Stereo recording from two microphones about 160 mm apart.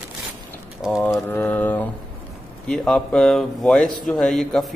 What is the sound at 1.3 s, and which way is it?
Speech, 10° left (ahead or behind).